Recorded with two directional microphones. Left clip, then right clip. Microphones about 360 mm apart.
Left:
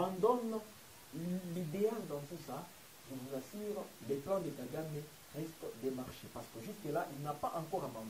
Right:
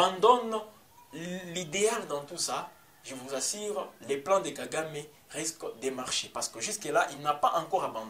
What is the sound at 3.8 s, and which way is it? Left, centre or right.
Speech, centre.